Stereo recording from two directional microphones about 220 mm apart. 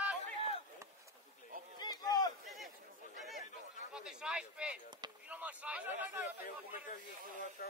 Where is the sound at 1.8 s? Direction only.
15° left (ahead or behind).